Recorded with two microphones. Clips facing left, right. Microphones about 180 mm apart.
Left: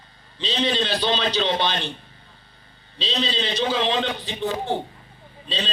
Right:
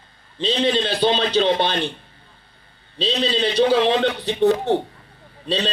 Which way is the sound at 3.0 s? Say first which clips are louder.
Right 5 dB; 55° right (ahead or behind).